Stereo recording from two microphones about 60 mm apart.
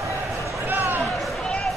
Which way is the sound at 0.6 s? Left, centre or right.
Right.